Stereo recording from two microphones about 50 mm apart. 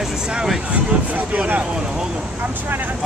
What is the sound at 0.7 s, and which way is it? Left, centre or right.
Speech, right.